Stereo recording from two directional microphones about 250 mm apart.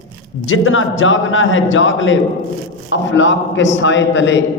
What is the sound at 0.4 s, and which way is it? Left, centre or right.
A man's voice, left.